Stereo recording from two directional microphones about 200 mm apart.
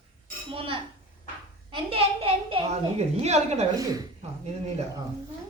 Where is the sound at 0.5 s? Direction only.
25° right (ahead or behind).